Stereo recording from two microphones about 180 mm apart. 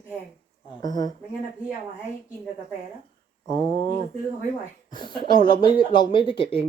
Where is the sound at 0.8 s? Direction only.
20° left (ahead or behind).